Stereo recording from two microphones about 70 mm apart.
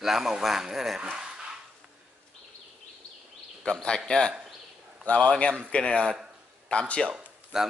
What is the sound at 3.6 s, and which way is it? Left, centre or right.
Speech, centre.